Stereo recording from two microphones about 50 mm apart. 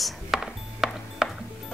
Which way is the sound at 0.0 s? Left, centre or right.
Centre.